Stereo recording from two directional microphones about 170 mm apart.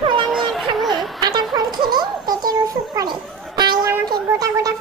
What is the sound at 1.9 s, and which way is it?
Music, 25° right (ahead or behind).